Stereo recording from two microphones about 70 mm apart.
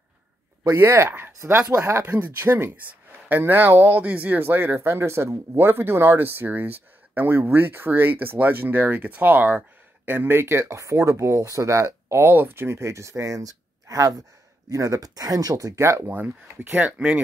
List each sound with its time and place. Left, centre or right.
0.7 s speech: right
5.7 s speech: right
16.1 s speech: right